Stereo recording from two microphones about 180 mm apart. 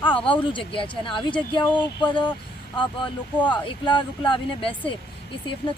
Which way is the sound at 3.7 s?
25° left (ahead or behind).